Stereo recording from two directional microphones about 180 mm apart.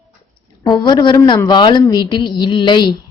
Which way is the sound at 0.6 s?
20° left (ahead or behind).